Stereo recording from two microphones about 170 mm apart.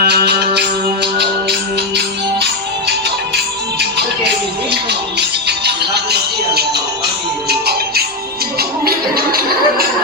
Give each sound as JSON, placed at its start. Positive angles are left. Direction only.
{"t": 0.0, "sound": "music", "side_deg": -70}
{"t": 5.5, "sound": "music", "side_deg": -75}